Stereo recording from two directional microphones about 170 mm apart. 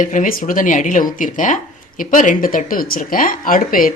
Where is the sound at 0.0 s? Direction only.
50° left (ahead or behind).